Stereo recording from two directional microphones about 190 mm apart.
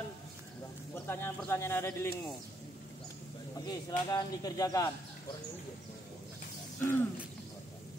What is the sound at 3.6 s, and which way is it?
Speech, 20° left (ahead or behind).